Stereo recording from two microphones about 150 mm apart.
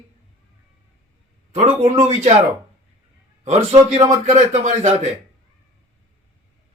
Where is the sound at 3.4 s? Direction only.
40° right (ahead or behind).